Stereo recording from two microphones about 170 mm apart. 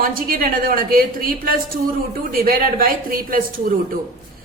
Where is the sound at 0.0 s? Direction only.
60° right (ahead or behind).